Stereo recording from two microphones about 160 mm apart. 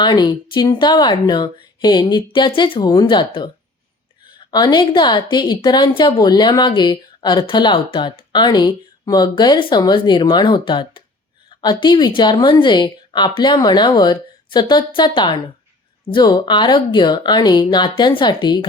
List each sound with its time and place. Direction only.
0.0 s a woman's voice: 25° left (ahead or behind)